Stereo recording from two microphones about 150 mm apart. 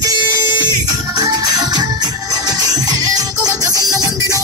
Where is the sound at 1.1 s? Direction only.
30° right (ahead or behind).